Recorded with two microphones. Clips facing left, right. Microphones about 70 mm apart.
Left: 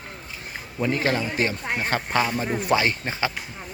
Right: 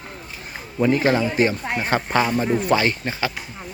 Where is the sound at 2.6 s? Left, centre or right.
Centre.